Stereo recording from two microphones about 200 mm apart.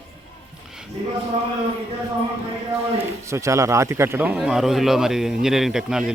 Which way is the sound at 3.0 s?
15° right (ahead or behind).